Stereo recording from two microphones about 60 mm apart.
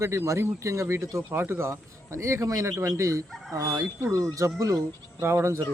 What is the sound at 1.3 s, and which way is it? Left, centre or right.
Speech, right.